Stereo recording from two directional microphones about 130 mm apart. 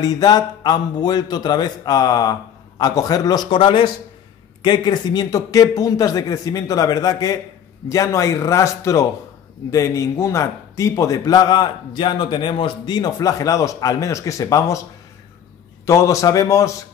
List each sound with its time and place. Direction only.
0.0 s a man's voice: 30° left (ahead or behind)
15.8 s a man's voice: 25° left (ahead or behind)